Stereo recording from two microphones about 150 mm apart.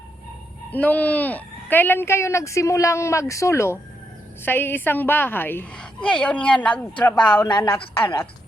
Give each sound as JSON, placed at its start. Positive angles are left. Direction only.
{"t": 0.7, "sound": "a woman's voice", "side_deg": 10}
{"t": 7.4, "sound": "a woman's voice", "side_deg": 30}